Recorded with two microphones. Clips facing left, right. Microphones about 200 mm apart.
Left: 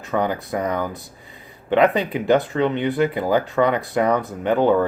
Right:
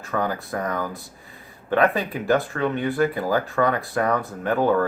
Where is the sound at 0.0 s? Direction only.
20° left (ahead or behind).